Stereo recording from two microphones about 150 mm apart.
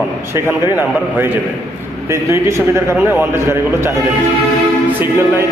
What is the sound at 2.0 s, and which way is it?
Speech, 20° right (ahead or behind).